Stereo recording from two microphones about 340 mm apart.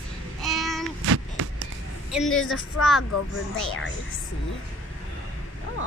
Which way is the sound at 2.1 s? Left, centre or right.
Centre.